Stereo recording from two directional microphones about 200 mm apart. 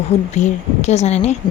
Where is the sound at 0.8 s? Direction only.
35° left (ahead or behind).